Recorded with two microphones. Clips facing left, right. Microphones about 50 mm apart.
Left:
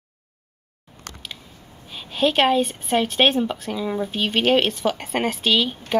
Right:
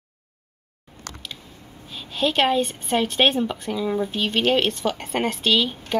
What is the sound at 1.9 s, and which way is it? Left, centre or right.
A woman's voice, centre.